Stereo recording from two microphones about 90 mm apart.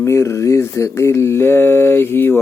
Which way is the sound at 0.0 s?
30° left (ahead or behind).